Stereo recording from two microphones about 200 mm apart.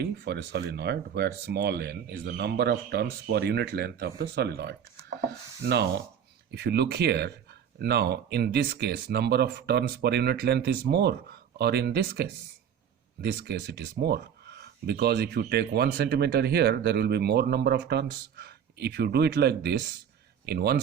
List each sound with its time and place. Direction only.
0.0 s speech: 55° right (ahead or behind)